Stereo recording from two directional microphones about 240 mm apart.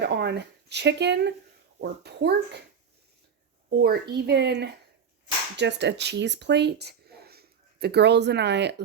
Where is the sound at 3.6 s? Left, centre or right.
Right.